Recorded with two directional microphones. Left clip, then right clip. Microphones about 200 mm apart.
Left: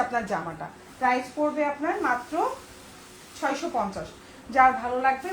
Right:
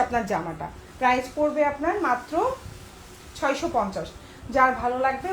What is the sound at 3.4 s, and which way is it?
Speech, 40° right (ahead or behind).